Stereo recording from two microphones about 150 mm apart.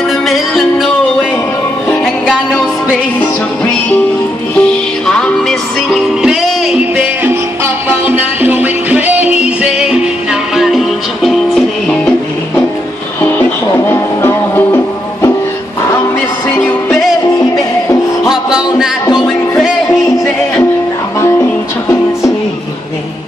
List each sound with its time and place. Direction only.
0.3 s music: centre (ahead or behind)
1.9 s music: 5° left (ahead or behind)
4.6 s music: 5° left (ahead or behind)
7.0 s music: 15° right (ahead or behind); by 12.1 s 5° left (ahead or behind)
13.8 s music: 15° left (ahead or behind)
18.3 s music: 5° right (ahead or behind)